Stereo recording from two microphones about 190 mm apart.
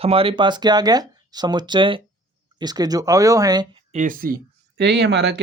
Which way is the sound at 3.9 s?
45° right (ahead or behind).